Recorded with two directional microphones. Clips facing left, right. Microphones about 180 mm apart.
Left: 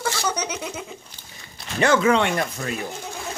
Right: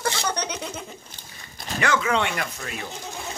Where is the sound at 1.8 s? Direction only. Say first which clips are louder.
Left 6 dB; 30° left (ahead or behind).